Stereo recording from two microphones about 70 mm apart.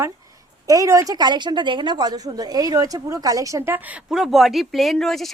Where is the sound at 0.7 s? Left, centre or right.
Right.